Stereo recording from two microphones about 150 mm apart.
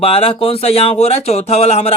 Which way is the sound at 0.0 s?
40° left (ahead or behind).